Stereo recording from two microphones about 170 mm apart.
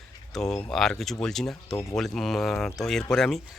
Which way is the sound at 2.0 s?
5° left (ahead or behind).